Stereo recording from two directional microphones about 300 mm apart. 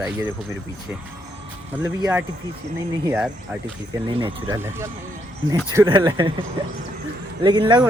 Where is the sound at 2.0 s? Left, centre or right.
Centre.